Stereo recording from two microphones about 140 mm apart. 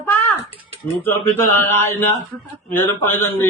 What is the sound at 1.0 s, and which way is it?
A man's voice, 15° left (ahead or behind).